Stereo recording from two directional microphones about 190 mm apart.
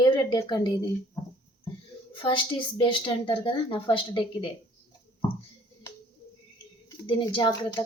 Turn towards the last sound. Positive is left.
turn(degrees=25)  # may be behind; listen again after turning